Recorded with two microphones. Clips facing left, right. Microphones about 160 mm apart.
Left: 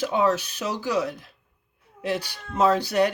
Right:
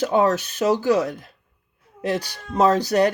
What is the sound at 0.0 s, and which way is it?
Speech, 45° right (ahead or behind).